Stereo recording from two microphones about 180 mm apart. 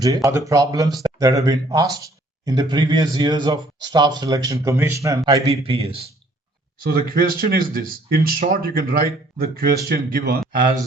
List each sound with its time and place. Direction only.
0.0 s speech: 20° right (ahead or behind)
5.5 s a man's voice: 35° right (ahead or behind)
6.8 s speech: 55° right (ahead or behind)